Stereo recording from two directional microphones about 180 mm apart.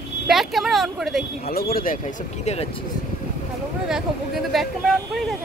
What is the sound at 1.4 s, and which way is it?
Speech, 55° left (ahead or behind).